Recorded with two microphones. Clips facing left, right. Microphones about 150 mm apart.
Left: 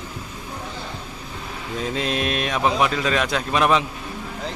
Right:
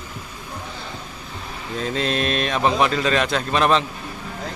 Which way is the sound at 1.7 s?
10° left (ahead or behind).